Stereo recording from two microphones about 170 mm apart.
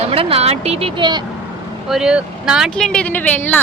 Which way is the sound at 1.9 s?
5° right (ahead or behind).